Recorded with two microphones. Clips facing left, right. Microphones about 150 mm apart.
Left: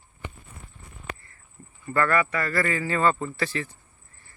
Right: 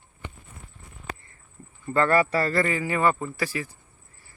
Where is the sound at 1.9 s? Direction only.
25° right (ahead or behind).